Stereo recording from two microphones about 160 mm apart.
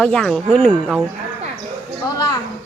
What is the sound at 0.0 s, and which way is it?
Speech, 5° left (ahead or behind).